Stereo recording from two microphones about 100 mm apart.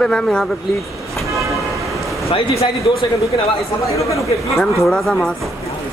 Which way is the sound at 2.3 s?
90° left.